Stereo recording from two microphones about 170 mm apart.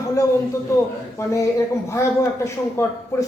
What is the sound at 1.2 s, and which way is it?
Speech, 15° left (ahead or behind).